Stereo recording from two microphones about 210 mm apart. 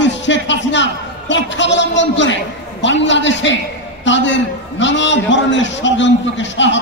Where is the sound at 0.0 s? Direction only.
60° left (ahead or behind).